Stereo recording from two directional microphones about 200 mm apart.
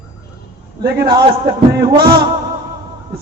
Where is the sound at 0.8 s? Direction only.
55° right (ahead or behind).